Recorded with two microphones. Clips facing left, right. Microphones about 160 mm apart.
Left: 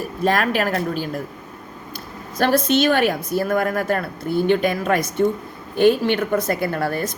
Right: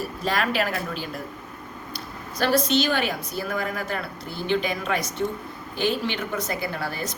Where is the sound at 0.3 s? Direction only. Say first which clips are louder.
Left 5 dB; 50° left (ahead or behind).